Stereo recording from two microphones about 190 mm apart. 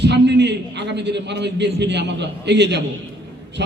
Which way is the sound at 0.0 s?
65° right (ahead or behind).